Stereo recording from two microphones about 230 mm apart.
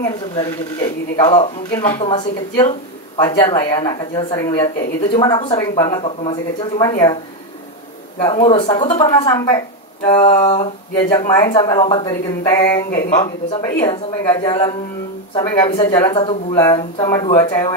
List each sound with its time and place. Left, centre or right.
0.0 s speech: centre
8.2 s speech: left
12.9 s speech: left
13.2 s speech: left